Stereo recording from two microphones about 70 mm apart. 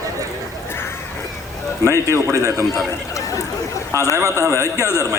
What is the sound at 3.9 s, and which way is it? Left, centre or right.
Speech, right.